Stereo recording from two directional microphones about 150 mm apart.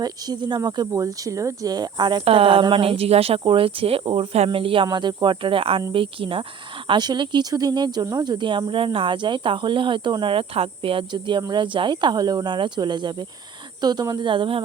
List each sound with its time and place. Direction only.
0.0 s speech: 30° right (ahead or behind)